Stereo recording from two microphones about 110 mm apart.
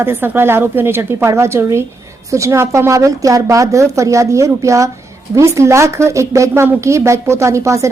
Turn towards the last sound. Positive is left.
turn(degrees=-25)  # may be behind; listen again after turning